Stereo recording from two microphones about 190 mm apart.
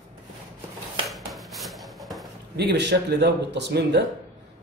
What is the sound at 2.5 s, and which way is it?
A man's voice, 60° right (ahead or behind).